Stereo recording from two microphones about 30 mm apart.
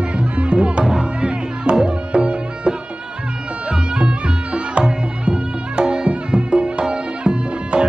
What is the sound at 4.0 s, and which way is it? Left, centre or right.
Music, right.